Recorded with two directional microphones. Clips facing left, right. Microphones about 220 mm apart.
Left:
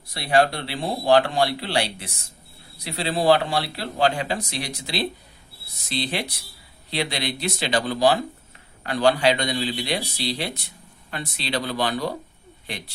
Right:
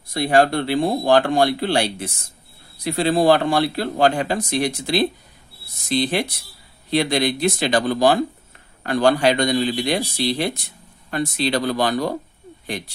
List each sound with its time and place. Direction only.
0.1 s speech: 50° right (ahead or behind)